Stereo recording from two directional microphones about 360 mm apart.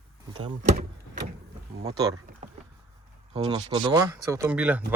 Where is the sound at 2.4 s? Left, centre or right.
Centre.